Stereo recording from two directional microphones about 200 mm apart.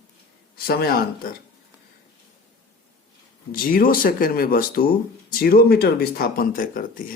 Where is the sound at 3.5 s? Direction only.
45° left (ahead or behind).